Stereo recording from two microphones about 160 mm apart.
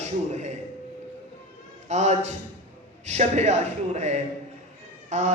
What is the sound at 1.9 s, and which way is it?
A man's voice, 45° right (ahead or behind).